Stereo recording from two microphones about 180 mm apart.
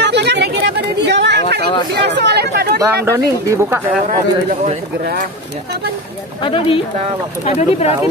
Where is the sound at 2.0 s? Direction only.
70° right (ahead or behind).